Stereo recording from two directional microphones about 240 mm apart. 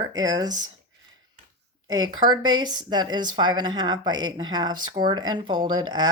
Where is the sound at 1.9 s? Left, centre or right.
Centre.